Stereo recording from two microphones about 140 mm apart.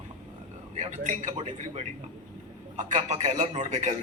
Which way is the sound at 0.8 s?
65° right (ahead or behind).